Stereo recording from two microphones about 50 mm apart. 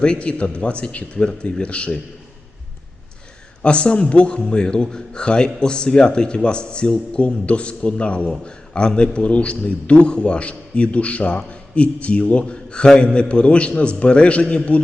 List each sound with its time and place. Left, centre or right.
0.0 s a man's voice: left
3.6 s a man's voice: left